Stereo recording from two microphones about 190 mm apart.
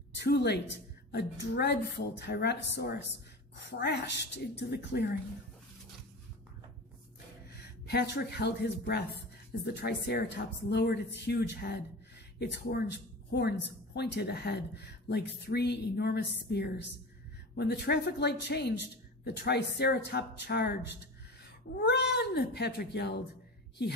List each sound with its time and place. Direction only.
0.2 s speech: 60° left (ahead or behind)
7.8 s speech: 60° left (ahead or behind)